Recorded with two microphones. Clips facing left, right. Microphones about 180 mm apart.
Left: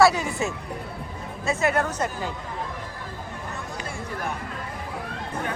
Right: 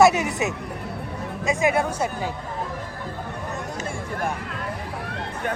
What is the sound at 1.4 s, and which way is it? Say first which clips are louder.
Speech: right 2 dB; 10° right (ahead or behind).